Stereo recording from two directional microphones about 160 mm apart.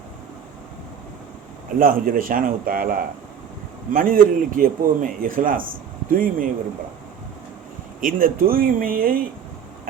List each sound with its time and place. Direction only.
1.8 s a man's voice: 60° right (ahead or behind)
8.0 s a man's voice: 60° right (ahead or behind)